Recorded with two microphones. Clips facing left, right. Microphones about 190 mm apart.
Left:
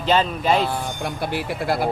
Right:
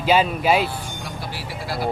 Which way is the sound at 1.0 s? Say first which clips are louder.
Left 7 dB; 55° left (ahead or behind).